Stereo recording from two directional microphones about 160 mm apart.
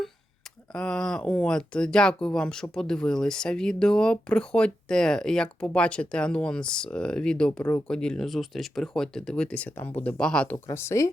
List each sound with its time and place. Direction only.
0.7 s speech: 5° left (ahead or behind)
10.7 s speech: 15° left (ahead or behind)